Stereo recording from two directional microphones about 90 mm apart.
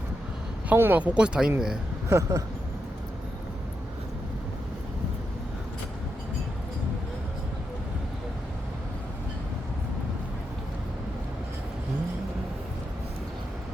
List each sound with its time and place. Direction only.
0.7 s speech: 20° right (ahead or behind)
2.0 s speech: 35° right (ahead or behind)